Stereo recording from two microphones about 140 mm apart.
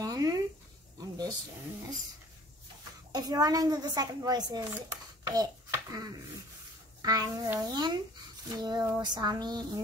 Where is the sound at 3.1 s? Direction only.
25° right (ahead or behind).